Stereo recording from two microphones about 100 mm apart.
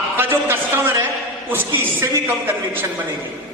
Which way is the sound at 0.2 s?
20° right (ahead or behind).